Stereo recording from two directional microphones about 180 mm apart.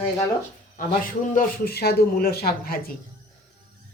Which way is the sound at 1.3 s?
55° left (ahead or behind).